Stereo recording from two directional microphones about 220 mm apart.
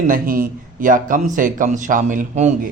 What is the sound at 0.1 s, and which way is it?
Speech, 40° right (ahead or behind).